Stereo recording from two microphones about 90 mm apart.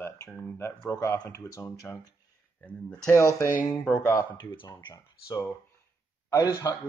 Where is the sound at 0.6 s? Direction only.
35° left (ahead or behind).